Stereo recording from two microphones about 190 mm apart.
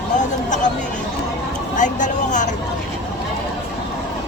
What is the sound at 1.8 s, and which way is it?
Vehicle, 40° left (ahead or behind).